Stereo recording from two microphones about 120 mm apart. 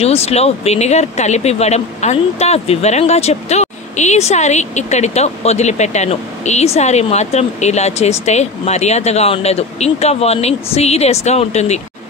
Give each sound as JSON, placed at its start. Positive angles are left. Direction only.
{"t": 0.0, "sound": "speech", "side_deg": 60}